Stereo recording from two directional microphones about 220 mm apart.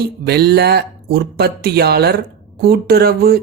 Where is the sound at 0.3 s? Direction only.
45° right (ahead or behind).